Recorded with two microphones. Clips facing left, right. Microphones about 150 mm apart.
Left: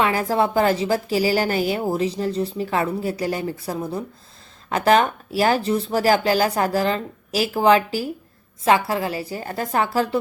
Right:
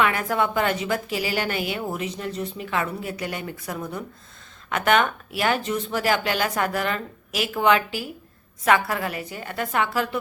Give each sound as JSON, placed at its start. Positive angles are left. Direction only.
{"t": 0.0, "sound": "a woman's voice", "side_deg": 30}